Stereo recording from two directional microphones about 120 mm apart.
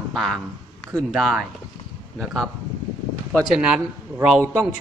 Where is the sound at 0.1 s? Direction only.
Centre (ahead or behind).